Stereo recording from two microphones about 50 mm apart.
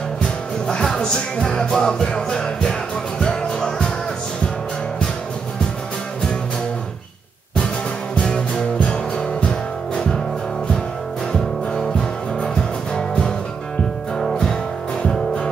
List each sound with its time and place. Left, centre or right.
0.7 s music: centre
8.7 s music: centre
12.9 s music: centre
14.1 s music: centre
14.4 s music: centre